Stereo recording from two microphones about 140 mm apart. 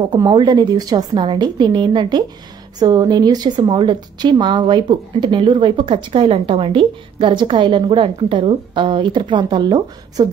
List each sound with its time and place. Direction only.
0.1 s a woman's voice: 35° right (ahead or behind)